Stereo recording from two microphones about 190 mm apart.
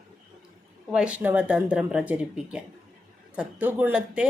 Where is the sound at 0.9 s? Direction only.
5° right (ahead or behind).